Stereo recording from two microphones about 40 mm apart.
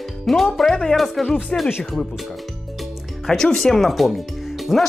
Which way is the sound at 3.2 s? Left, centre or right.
Centre.